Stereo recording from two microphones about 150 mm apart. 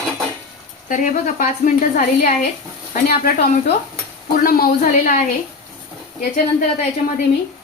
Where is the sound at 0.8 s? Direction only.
60° left (ahead or behind).